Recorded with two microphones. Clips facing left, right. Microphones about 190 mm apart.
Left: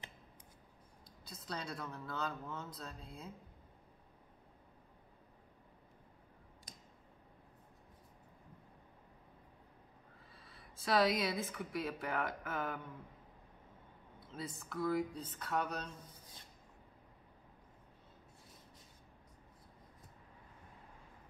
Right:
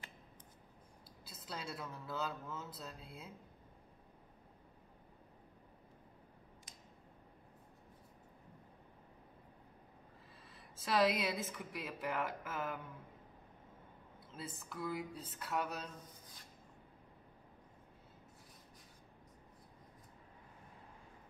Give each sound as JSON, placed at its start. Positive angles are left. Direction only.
{"t": 1.2, "sound": "speech", "side_deg": -5}
{"t": 6.7, "sound": "a sound", "side_deg": 40}
{"t": 10.4, "sound": "speech", "side_deg": 0}
{"t": 14.3, "sound": "speech", "side_deg": 0}